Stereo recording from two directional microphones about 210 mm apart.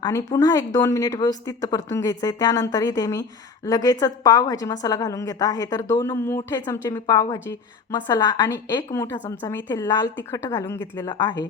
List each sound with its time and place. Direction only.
0.0 s speech: 15° left (ahead or behind)
11.1 s speech: 20° left (ahead or behind)